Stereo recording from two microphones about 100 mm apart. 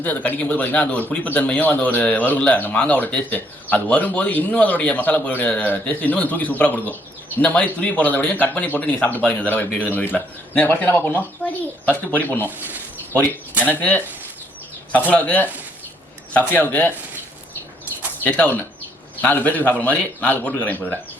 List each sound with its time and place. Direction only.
0.0 s speech: 15° left (ahead or behind)
13.7 s speech: 15° left (ahead or behind)
18.2 s speech: 15° left (ahead or behind)